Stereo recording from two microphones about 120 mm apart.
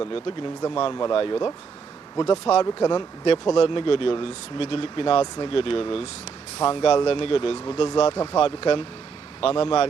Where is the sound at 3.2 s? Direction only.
50° left (ahead or behind).